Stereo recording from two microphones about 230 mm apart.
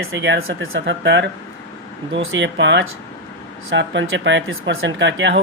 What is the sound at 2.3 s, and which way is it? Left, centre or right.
Speech, right.